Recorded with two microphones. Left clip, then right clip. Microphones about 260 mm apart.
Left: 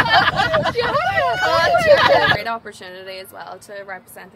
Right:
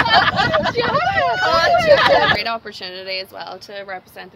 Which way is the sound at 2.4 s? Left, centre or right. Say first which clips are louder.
Right 2 dB; right.